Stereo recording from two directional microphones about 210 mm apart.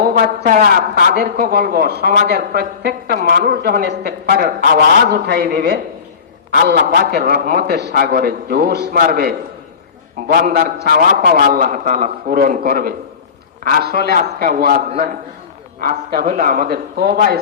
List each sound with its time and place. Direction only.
0.0 s a woman's voice: 45° right (ahead or behind)